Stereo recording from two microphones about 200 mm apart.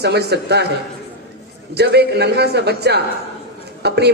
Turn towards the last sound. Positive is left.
turn(degrees=-55)  # may be behind; listen again after turning